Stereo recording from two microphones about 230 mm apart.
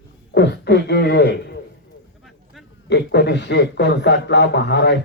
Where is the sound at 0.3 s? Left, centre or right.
Left.